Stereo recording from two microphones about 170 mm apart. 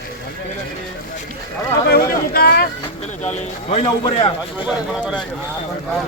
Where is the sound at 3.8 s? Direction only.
30° left (ahead or behind).